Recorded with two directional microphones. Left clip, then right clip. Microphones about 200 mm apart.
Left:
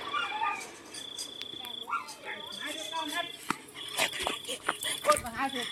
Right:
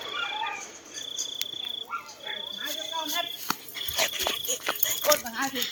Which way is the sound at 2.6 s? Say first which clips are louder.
Right 2 dB; 50° right (ahead or behind).